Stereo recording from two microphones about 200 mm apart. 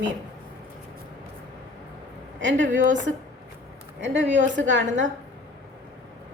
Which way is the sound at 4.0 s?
60° right (ahead or behind).